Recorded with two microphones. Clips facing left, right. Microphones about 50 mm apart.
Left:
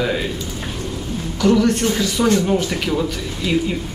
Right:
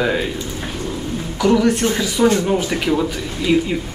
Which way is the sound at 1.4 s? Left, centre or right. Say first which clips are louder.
Even; centre.